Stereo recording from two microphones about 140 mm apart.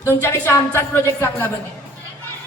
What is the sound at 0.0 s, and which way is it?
Speech, 20° left (ahead or behind).